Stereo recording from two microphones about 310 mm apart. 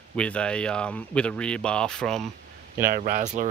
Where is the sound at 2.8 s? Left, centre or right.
Right.